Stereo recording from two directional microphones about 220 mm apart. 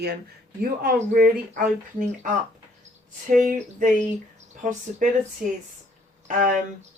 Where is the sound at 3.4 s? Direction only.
35° right (ahead or behind).